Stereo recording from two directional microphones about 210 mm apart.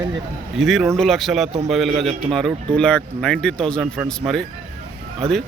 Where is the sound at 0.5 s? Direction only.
Centre (ahead or behind).